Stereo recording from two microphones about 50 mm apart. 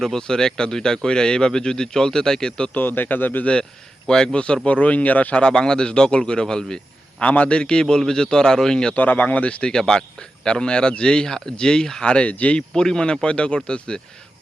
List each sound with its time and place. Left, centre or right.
0.0 s speech: centre
2.7 s a man's voice: left
3.4 s speech: left
7.2 s speech: left
9.0 s speech: left
12.7 s speech: centre